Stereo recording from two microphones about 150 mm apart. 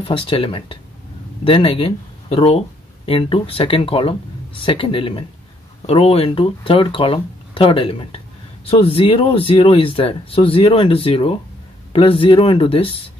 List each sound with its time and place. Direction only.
0.0 s speech: 35° left (ahead or behind)